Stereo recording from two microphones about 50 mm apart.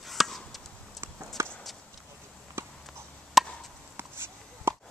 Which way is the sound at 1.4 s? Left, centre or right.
Right.